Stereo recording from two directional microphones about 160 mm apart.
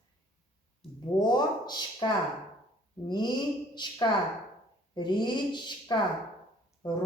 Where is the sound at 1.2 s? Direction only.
25° left (ahead or behind).